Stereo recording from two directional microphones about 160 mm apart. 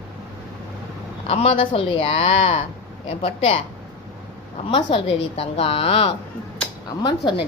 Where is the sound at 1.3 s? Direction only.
40° left (ahead or behind).